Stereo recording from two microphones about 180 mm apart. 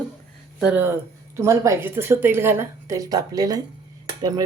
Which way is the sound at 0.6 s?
10° right (ahead or behind).